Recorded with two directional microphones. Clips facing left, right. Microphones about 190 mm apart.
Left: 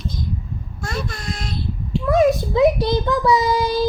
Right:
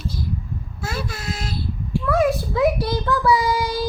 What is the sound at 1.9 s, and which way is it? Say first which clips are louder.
A child's voice: left 3 dB; 20° left (ahead or behind).